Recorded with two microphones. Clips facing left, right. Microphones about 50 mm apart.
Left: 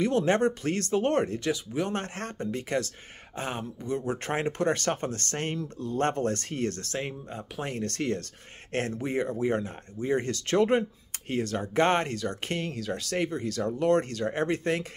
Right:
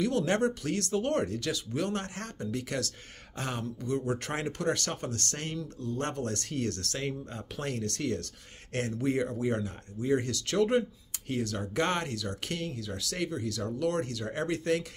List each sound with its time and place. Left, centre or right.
0.0 s speech: left
1.5 s speech: centre
2.0 s speech: left; by 7.8 s centre
7.8 s speech: left
9.0 s speech: left
12.7 s speech: left
13.1 s speech: left